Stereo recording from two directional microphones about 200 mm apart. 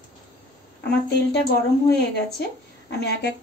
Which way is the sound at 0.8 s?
50° left (ahead or behind).